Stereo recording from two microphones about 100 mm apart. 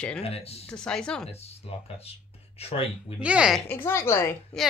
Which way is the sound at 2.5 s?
80° left.